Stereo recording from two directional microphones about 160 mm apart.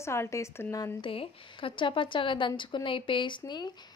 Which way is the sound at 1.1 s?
35° left (ahead or behind).